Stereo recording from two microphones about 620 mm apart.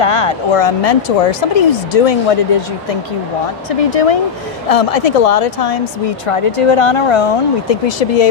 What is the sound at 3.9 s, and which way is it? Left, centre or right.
A woman's voice, left.